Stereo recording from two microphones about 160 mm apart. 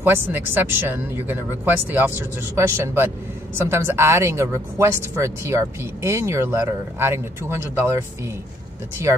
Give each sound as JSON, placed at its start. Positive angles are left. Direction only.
{"t": 0.0, "sound": "a woman's voice", "side_deg": -10}